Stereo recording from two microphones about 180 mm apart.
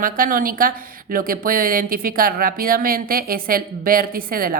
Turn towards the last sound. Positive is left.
turn(degrees=-55)  # may be behind; listen again after turning